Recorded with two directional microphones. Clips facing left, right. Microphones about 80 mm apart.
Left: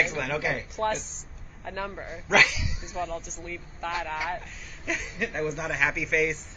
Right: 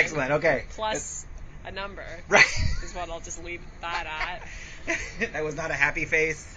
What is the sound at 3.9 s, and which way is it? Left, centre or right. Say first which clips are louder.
Speech: left 1 dB; centre.